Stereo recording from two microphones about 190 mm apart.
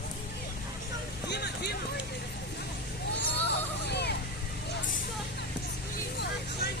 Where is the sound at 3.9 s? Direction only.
60° left (ahead or behind).